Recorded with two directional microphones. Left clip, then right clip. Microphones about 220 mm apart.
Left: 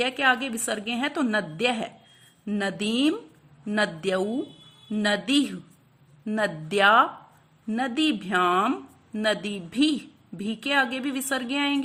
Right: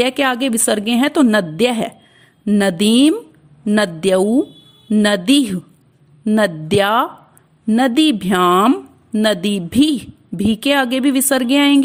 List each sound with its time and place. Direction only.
0.0 s a woman's voice: 45° right (ahead or behind)